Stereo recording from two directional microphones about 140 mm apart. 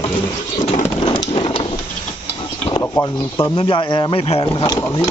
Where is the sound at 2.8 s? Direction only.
20° left (ahead or behind).